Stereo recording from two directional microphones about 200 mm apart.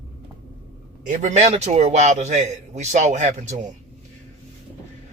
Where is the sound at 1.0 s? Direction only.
35° right (ahead or behind).